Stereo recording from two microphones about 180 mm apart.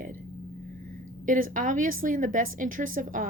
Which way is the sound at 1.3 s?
50° right (ahead or behind).